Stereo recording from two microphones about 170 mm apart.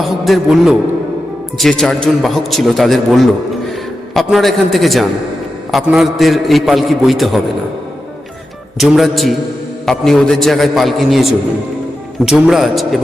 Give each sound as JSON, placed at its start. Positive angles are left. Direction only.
{"t": 0.0, "sound": "a man's voice", "side_deg": 0}
{"t": 8.8, "sound": "a man's voice", "side_deg": 0}